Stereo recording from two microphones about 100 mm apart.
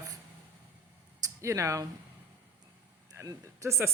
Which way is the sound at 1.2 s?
30° right (ahead or behind).